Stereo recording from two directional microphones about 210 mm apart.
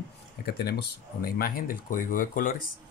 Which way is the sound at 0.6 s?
45° left (ahead or behind).